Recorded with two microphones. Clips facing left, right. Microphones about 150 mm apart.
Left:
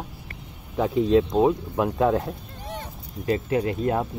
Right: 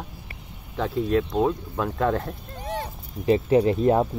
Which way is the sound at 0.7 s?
15° left (ahead or behind).